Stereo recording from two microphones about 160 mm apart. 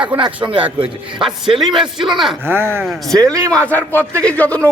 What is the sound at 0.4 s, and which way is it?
Speech, 30° right (ahead or behind).